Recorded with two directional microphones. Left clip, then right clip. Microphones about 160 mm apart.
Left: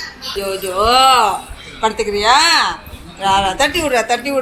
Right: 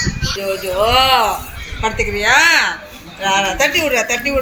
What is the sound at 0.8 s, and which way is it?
Speech, 30° left (ahead or behind).